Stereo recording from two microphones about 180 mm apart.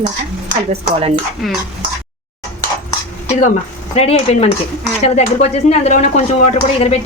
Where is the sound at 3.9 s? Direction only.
35° left (ahead or behind).